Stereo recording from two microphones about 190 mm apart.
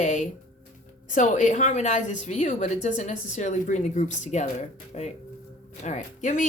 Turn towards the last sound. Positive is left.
turn(degrees=40)  # may be behind; listen again after turning